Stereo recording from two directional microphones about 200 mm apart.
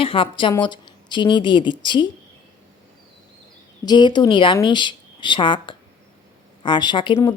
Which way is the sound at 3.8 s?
20° left (ahead or behind).